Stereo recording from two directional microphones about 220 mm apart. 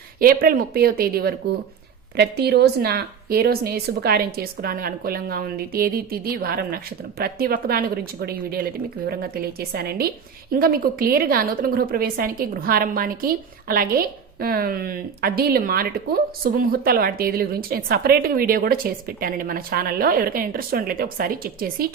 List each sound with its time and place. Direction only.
0.2 s a woman's voice: 40° right (ahead or behind)